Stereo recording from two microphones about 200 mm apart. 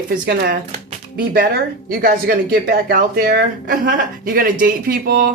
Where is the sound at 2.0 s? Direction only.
50° right (ahead or behind).